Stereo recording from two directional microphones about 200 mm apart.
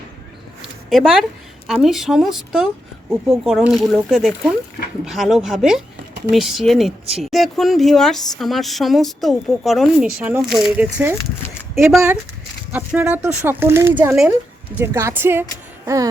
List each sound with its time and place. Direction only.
0.9 s speech: centre (ahead or behind)